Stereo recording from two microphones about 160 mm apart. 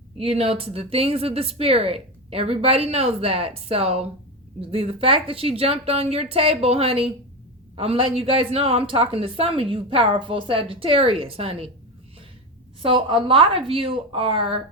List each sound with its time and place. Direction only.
0.2 s a woman's voice: 35° right (ahead or behind)
12.8 s a woman's voice: 35° right (ahead or behind)